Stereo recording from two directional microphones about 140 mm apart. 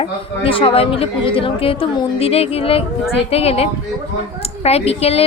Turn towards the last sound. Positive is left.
turn(degrees=45)  # may be behind; listen again after turning